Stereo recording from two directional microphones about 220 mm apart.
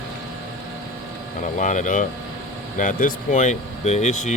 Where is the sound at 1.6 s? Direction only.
35° left (ahead or behind).